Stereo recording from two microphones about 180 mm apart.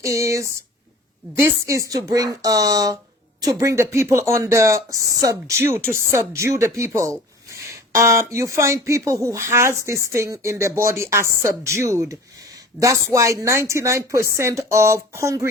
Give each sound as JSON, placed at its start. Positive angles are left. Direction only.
{"t": 0.0, "sound": "speech", "side_deg": -15}